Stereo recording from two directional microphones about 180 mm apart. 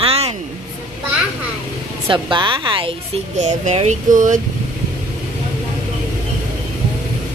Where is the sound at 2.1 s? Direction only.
25° right (ahead or behind).